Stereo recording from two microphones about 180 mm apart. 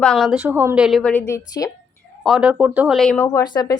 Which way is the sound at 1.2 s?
15° left (ahead or behind).